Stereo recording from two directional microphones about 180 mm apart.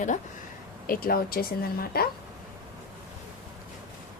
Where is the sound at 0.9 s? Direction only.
55° left (ahead or behind).